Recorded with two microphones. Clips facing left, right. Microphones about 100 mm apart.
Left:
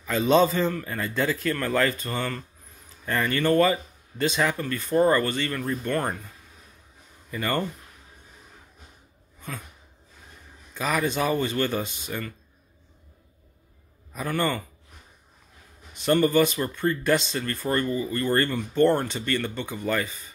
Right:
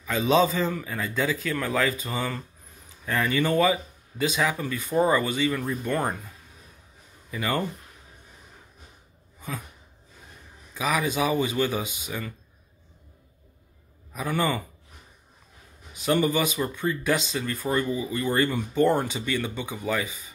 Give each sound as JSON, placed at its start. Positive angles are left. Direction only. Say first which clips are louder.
{"t": 0.0, "sound": "speech", "louder": "left 1 dB", "side_deg": 0}
{"t": 7.2, "sound": "speech", "louder": "left 1 dB", "side_deg": -5}
{"t": 10.7, "sound": "speech", "louder": "even", "side_deg": -5}
{"t": 14.1, "sound": "speech", "louder": "even", "side_deg": -5}
{"t": 15.9, "sound": "speech", "louder": "left 2 dB", "side_deg": -5}